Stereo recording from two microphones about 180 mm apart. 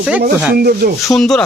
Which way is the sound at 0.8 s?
65° right (ahead or behind).